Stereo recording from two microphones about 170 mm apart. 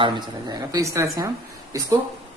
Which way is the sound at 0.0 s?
25° right (ahead or behind).